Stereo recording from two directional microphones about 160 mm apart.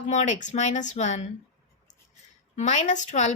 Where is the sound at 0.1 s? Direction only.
50° left (ahead or behind).